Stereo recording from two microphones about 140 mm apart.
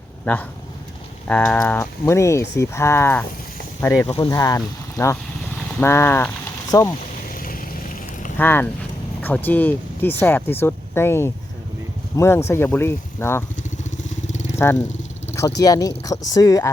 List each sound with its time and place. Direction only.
1.3 s speech: 10° left (ahead or behind)
7.3 s vehicle: 85° left
8.4 s speech: 15° left (ahead or behind)
14.3 s vehicle: 55° left (ahead or behind)
15.4 s speech: 25° left (ahead or behind)